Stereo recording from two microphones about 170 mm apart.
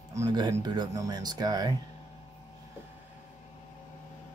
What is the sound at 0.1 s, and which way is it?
Speech, 20° right (ahead or behind).